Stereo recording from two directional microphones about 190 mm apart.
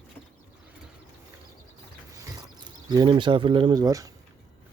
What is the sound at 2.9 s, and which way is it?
Speech, 25° right (ahead or behind).